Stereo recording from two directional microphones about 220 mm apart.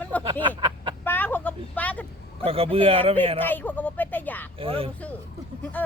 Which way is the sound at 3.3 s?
10° left (ahead or behind).